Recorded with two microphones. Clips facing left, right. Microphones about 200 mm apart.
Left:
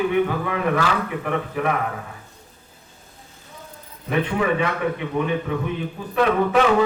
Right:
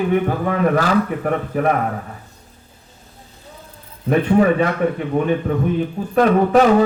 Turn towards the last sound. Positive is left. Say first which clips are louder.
# right 5 dB
turn(degrees=-40)  # may be behind; listen again after turning